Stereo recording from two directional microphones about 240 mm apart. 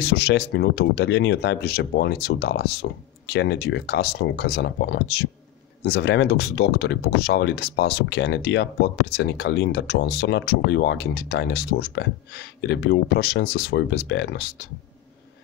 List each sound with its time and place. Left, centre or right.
0.0 s speech: left